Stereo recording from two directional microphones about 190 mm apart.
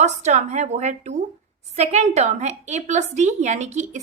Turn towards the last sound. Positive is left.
turn(degrees=-35)  # may be behind; listen again after turning